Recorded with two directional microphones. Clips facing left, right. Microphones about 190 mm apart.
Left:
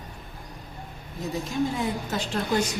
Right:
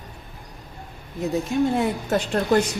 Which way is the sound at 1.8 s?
60° right (ahead or behind).